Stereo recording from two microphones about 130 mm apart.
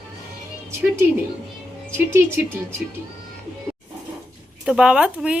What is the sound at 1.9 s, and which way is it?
Speech, 20° right (ahead or behind).